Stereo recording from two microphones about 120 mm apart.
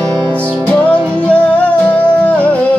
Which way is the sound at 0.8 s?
10° left (ahead or behind).